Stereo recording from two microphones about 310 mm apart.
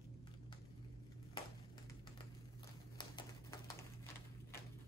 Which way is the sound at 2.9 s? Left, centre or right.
Centre.